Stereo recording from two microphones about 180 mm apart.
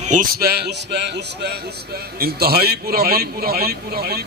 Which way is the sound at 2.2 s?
60° right (ahead or behind).